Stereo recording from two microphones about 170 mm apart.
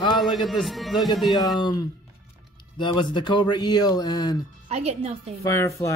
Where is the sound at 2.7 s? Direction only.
25° left (ahead or behind).